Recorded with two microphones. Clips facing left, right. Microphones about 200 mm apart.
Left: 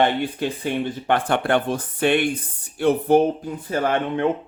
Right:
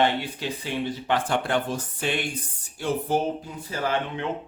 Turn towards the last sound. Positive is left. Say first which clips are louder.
# left 6 dB
turn(degrees=55)  # may be behind; listen again after turning